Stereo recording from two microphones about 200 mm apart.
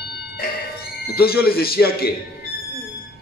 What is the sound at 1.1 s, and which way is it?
A man's voice, 50° left (ahead or behind).